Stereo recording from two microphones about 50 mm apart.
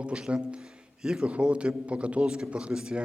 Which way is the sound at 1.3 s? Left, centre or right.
Right.